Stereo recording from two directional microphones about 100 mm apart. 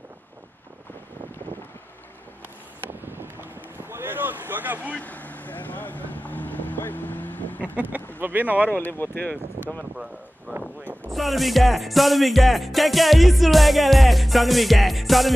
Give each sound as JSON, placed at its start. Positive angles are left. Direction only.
{"t": 3.1, "sound": "boat", "side_deg": -20}
{"t": 4.9, "sound": "vehicle", "side_deg": 15}
{"t": 8.2, "sound": "speech", "side_deg": -20}
{"t": 8.6, "sound": "speech", "side_deg": 20}
{"t": 10.5, "sound": "a sound", "side_deg": -15}
{"t": 11.1, "sound": "music", "side_deg": 0}